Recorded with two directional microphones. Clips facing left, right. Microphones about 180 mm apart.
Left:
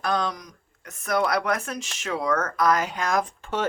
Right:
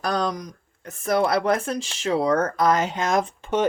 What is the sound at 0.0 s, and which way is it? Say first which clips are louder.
Speech: right 2 dB; 40° right (ahead or behind).